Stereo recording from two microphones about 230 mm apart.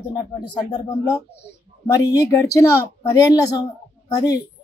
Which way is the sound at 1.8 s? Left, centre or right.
Centre.